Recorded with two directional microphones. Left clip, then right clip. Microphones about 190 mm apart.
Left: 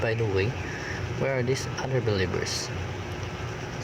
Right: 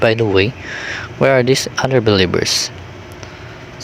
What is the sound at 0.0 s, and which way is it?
Speech, 45° right (ahead or behind).